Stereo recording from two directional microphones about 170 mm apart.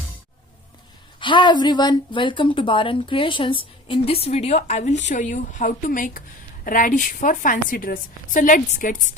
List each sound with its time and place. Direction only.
1.2 s a woman's voice: 30° left (ahead or behind); by 9.0 s 50° left (ahead or behind)